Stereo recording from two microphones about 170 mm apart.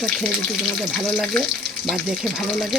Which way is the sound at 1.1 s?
5° left (ahead or behind).